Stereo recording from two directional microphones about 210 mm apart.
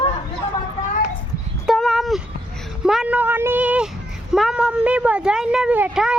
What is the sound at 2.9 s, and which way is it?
A woman's voice, 5° right (ahead or behind).